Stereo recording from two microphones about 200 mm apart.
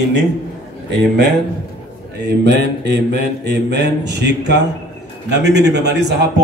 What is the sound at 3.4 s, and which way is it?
A man's voice, 60° right (ahead or behind).